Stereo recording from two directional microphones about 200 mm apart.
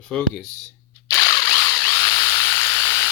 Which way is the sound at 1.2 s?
20° left (ahead or behind).